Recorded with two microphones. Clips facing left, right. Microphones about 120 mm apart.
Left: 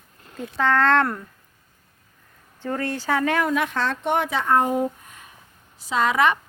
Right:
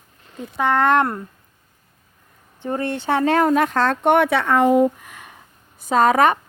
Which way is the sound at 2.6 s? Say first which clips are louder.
Right 3 dB; 20° right (ahead or behind).